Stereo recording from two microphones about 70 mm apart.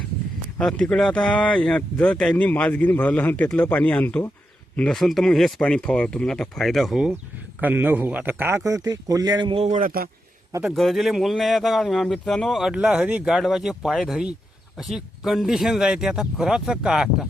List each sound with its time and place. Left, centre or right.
0.6 s speech: centre
4.9 s speech: centre
5.5 s speech: centre
7.6 s a man's voice: right
8.5 s speech: right
10.8 s speech: centre
12.6 s speech: centre